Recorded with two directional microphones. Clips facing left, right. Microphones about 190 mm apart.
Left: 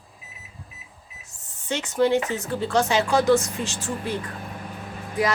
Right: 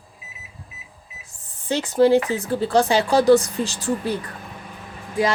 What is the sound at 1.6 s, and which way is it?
Speech, 35° right (ahead or behind).